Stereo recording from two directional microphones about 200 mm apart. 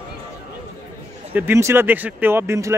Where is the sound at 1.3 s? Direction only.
10° right (ahead or behind).